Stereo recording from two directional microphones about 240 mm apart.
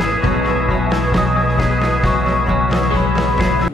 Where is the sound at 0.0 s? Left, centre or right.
Centre.